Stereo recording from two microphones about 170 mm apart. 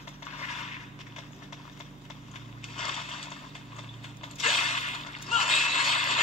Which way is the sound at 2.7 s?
35° left (ahead or behind).